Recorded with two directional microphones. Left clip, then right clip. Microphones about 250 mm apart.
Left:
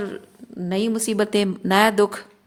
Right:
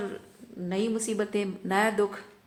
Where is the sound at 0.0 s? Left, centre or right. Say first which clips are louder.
Left 5 dB; left.